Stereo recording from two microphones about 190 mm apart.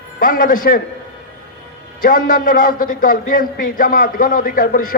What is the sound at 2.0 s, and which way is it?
A man's voice, 50° left (ahead or behind).